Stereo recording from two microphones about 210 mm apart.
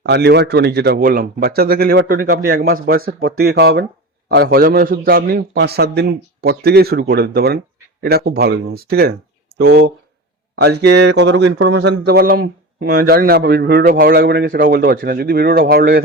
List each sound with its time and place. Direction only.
0.0 s speech: 55° right (ahead or behind)